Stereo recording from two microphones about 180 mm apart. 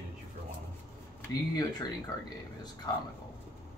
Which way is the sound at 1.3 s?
20° left (ahead or behind).